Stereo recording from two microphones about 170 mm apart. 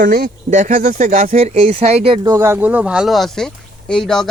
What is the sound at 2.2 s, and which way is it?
Speech, 15° right (ahead or behind).